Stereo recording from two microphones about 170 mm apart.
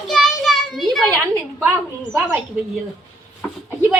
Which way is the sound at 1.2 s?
10° right (ahead or behind).